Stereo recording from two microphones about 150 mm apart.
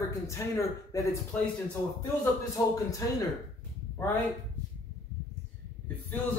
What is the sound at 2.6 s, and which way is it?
Speech, 20° left (ahead or behind).